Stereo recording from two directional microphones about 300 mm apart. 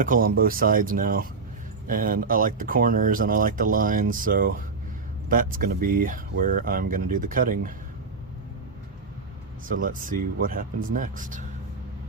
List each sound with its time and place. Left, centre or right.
0.0 s speech: right
9.6 s speech: right